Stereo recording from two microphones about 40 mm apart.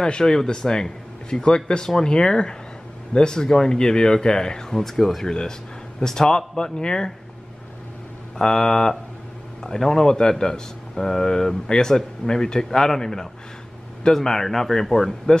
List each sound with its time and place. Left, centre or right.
0.0 s speech: centre
8.5 s speech: centre